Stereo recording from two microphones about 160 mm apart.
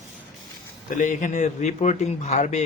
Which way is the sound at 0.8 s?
55° left (ahead or behind).